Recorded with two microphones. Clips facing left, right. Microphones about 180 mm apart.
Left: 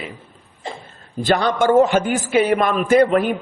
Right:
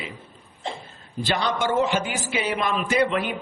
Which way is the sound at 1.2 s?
50° left (ahead or behind).